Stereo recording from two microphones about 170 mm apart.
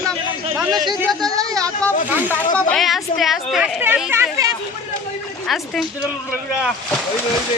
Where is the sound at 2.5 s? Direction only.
Centre (ahead or behind).